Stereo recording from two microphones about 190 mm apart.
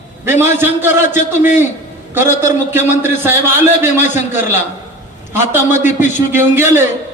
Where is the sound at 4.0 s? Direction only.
40° left (ahead or behind).